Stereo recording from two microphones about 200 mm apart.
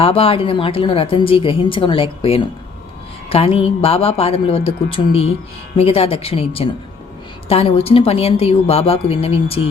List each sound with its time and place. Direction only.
0.0 s a woman's voice: 30° left (ahead or behind)